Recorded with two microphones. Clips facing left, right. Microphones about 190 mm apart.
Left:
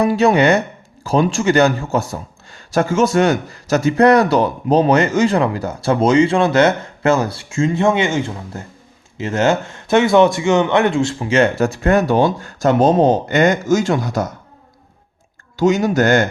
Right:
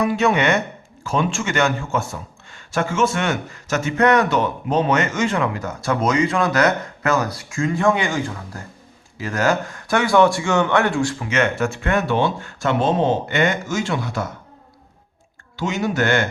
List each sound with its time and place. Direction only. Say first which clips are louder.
0.0 s a man's voice: left 5 dB; 35° left (ahead or behind)
15.5 s a man's voice: left 7 dB; 40° left (ahead or behind)